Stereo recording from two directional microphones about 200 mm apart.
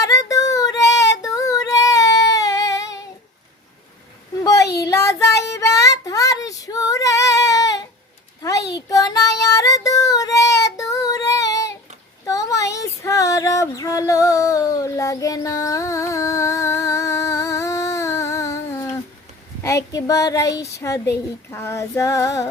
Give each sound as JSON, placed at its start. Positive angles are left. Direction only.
{"t": 0.0, "sound": "child singing", "side_deg": 15}
{"t": 4.9, "sound": "child singing", "side_deg": 15}
{"t": 5.5, "sound": "female singing", "side_deg": 15}
{"t": 8.4, "sound": "a sound", "side_deg": 15}
{"t": 8.7, "sound": "child singing", "side_deg": 20}
{"t": 12.2, "sound": "female singing", "side_deg": 15}
{"t": 19.6, "sound": "speech", "side_deg": 15}